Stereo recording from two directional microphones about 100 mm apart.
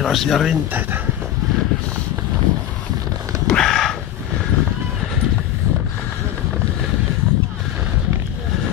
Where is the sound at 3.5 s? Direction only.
5° left (ahead or behind).